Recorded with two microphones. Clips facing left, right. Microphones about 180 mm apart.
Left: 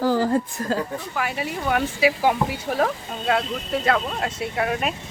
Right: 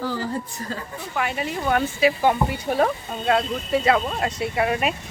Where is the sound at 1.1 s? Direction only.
5° left (ahead or behind).